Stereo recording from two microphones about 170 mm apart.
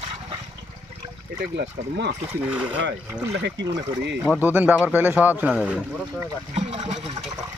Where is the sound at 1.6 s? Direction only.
90° right.